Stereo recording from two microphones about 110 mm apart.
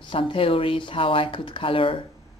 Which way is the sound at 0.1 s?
50° left (ahead or behind).